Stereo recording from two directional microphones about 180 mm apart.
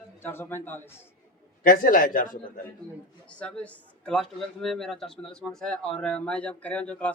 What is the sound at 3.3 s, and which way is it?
Speech, 5° left (ahead or behind).